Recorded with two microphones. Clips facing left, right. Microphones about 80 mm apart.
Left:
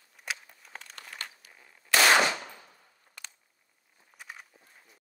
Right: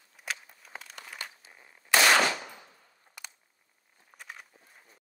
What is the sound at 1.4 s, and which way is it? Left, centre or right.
Firecracker, right.